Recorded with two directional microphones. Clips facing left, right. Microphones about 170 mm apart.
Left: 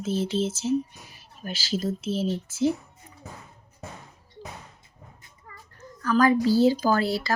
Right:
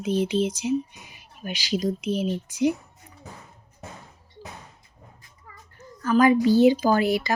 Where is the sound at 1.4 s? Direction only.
15° right (ahead or behind).